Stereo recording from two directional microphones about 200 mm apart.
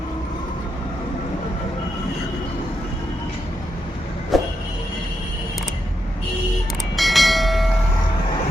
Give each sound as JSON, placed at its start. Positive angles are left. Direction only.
{"t": 4.3, "sound": "vehicle", "side_deg": 0}
{"t": 6.9, "sound": "train", "side_deg": 0}